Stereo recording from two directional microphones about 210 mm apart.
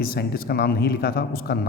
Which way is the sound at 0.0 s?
45° left (ahead or behind).